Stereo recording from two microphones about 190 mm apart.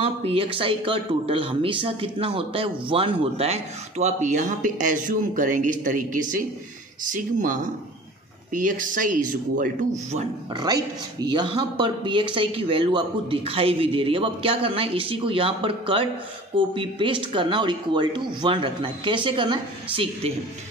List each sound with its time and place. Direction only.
0.0 s a man's voice: 30° right (ahead or behind)
10.5 s speech: 20° right (ahead or behind)